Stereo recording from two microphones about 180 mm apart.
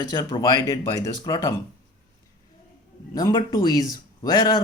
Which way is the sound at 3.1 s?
20° left (ahead or behind).